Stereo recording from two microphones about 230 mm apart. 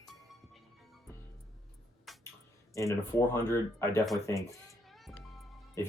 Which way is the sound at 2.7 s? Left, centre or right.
Centre.